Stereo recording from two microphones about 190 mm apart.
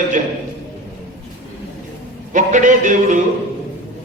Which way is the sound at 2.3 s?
40° right (ahead or behind).